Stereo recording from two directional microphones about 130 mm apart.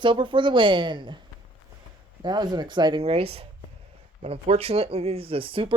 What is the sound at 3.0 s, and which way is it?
Speech, 50° right (ahead or behind).